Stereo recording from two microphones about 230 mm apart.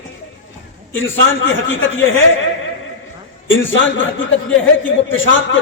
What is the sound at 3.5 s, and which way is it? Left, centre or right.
Speech, left.